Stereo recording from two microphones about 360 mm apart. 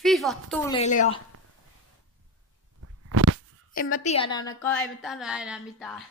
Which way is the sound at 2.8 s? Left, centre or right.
Right.